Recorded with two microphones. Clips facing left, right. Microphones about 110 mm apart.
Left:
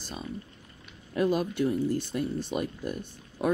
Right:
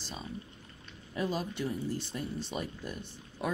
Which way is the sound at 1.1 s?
55° left (ahead or behind).